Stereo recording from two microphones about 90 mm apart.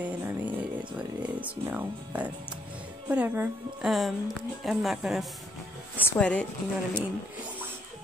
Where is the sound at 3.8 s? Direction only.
Centre (ahead or behind).